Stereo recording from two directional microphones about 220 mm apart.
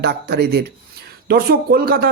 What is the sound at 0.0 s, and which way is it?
Speech, 45° right (ahead or behind).